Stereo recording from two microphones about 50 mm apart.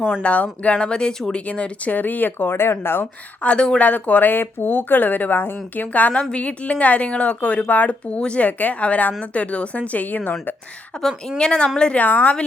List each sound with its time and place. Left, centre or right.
0.2 s speech: left
1.9 s speech: left
3.0 s speech: left
10.9 s speech: centre
12.0 s speech: left